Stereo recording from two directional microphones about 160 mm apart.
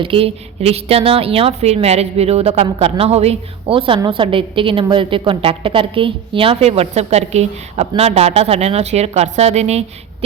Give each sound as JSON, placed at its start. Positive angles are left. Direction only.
{"t": 0.0, "sound": "a woman's voice", "side_deg": -35}